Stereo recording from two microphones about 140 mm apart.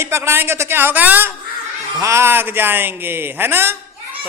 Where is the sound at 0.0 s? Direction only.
20° right (ahead or behind).